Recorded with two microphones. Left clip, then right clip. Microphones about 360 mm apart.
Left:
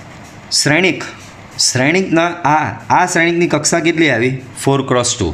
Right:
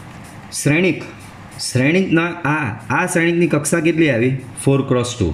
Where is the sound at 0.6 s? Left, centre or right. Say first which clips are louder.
Left 3 dB; centre.